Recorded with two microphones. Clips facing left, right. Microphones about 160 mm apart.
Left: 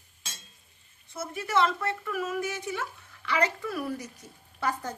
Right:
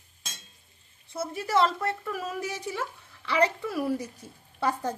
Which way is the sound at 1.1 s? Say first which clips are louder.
Right 2 dB; 35° right (ahead or behind).